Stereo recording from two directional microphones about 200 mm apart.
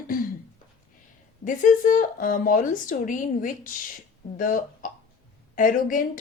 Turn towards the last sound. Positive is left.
turn(degrees=40)  # may be behind; listen again after turning